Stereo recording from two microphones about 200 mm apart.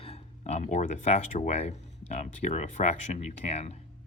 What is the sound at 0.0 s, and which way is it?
Speech, 30° left (ahead or behind).